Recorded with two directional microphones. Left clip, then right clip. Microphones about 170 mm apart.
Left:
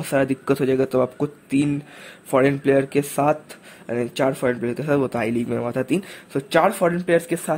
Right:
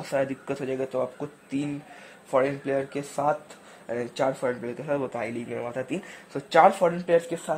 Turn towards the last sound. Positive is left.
turn(degrees=10)  # may be behind; listen again after turning